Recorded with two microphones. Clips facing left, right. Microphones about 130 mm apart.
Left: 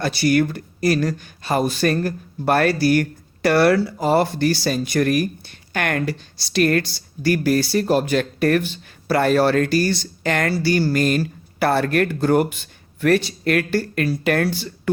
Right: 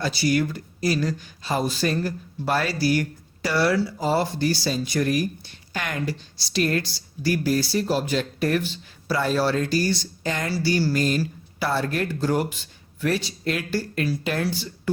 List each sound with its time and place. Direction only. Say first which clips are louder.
0.0 s speech: left 5 dB; 60° left (ahead or behind)